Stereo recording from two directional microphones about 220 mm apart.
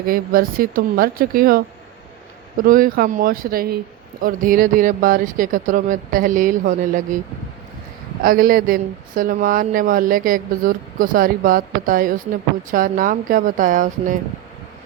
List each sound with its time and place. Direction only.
0.0 s speech: 40° right (ahead or behind)
8.2 s speech: 40° right (ahead or behind)